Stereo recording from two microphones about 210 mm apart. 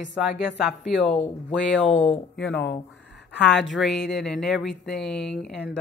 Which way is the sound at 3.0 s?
60° left (ahead or behind).